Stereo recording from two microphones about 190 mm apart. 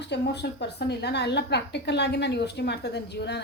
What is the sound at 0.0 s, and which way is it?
A woman's voice, 65° left (ahead or behind).